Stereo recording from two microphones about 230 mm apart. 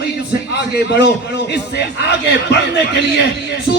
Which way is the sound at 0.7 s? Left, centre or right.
Left.